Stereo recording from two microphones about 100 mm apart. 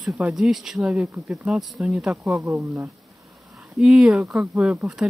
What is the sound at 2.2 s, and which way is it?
Speech, 30° right (ahead or behind).